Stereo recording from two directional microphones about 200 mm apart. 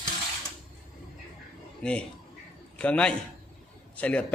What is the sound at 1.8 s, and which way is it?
A man's voice, 5° left (ahead or behind).